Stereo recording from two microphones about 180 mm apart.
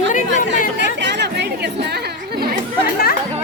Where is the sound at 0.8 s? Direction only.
75° right (ahead or behind).